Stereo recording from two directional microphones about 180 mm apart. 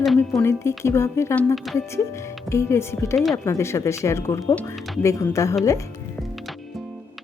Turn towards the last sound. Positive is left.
turn(degrees=15)  # may be behind; listen again after turning